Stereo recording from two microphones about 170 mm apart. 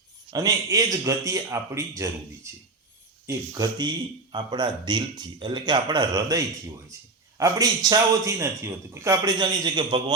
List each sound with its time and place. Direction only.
0.3 s a man's voice: 20° right (ahead or behind)